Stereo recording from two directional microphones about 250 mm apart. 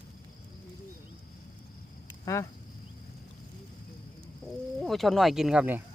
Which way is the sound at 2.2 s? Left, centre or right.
Centre.